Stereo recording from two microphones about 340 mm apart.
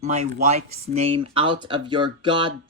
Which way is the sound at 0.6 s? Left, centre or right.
Right.